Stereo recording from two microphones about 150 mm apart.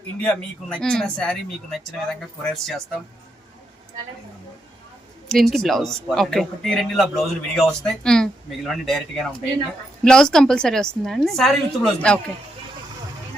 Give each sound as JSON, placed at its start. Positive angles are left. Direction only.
{"t": 0.2, "sound": "a man's voice", "side_deg": 5}
{"t": 5.3, "sound": "a man's voice", "side_deg": 0}